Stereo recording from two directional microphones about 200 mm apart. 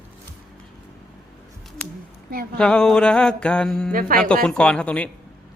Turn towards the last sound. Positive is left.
turn(degrees=5)  # may be behind; listen again after turning